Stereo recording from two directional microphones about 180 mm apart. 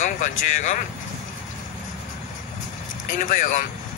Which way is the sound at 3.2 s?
45° left (ahead or behind).